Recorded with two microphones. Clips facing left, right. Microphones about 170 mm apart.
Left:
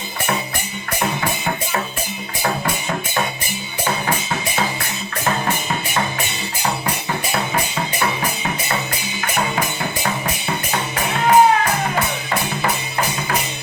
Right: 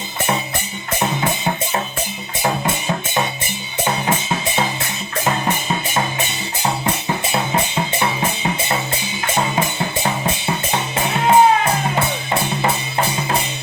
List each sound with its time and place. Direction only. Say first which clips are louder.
2.4 s music: right 2 dB; 25° right (ahead or behind)
7.5 s drum kit: right 2 dB; 25° right (ahead or behind)
9.2 s music: right 2 dB; 25° right (ahead or behind)
12.3 s drum: right 3 dB; 25° right (ahead or behind)